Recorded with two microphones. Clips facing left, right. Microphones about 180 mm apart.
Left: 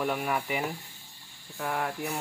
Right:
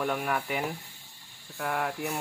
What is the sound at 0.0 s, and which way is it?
Speech, 5° left (ahead or behind).